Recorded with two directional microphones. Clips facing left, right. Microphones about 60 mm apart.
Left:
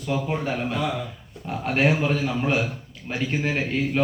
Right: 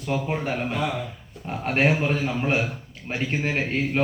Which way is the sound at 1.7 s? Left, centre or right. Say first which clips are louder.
Even; right.